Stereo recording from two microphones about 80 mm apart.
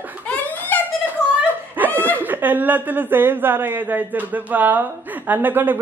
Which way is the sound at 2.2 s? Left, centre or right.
Right.